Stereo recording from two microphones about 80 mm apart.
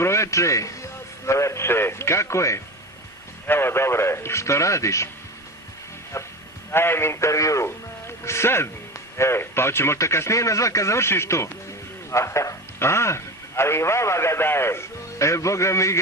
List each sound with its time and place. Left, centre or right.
0.0 s a man's voice: left
3.4 s a man's voice: left
6.1 s a man's voice: left